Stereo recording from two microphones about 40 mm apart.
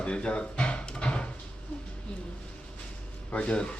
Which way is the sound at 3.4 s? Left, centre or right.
Left.